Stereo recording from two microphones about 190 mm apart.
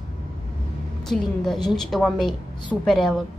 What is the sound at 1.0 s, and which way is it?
A woman's voice, centre (ahead or behind).